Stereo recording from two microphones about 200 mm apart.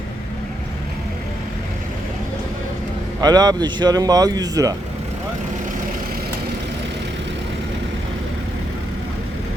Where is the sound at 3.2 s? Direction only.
20° right (ahead or behind).